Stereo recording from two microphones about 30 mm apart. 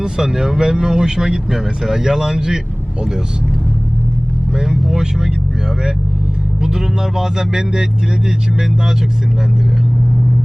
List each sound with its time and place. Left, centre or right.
0.0 s speech: right
4.5 s speech: centre
6.6 s speech: centre